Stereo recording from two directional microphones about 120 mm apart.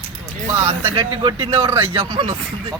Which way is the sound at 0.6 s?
20° right (ahead or behind).